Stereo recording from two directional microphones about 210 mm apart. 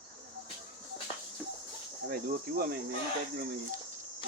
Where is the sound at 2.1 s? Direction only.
45° right (ahead or behind).